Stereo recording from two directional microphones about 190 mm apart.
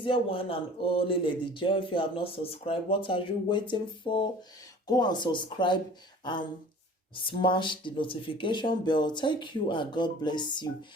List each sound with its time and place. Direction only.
0.0 s speech: 25° left (ahead or behind)